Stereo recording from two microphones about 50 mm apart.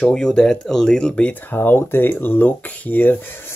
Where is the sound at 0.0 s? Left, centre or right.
Centre.